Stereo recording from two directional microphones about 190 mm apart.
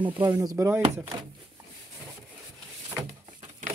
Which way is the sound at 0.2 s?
20° right (ahead or behind).